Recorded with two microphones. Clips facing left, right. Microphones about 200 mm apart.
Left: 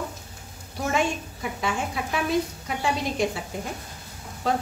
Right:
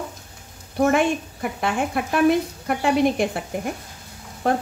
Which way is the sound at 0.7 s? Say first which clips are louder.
Right 7 dB; 55° right (ahead or behind).